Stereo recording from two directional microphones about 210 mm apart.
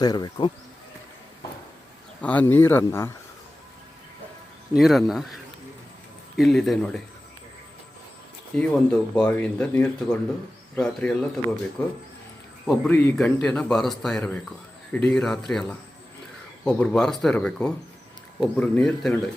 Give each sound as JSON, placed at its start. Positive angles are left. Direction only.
{"t": 0.0, "sound": "speech", "side_deg": 20}
{"t": 2.2, "sound": "a man's voice", "side_deg": 5}
{"t": 4.7, "sound": "speech", "side_deg": 0}
{"t": 8.5, "sound": "speech", "side_deg": 5}
{"t": 16.6, "sound": "speech", "side_deg": 5}